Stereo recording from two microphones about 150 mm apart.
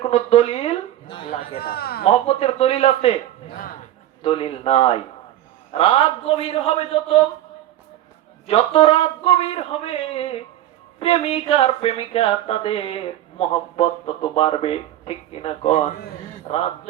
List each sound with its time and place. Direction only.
0.1 s a sound: 40° left (ahead or behind)
1.5 s speech: 90° left
2.2 s speech: 40° left (ahead or behind)
4.2 s speech: 40° left (ahead or behind)
8.4 s speech: 40° left (ahead or behind)